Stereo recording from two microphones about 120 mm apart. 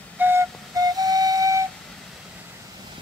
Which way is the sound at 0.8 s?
30° right (ahead or behind).